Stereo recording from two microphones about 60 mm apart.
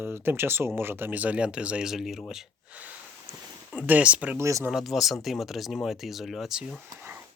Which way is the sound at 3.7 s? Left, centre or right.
Right.